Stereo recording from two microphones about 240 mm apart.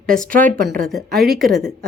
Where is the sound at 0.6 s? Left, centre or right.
Right.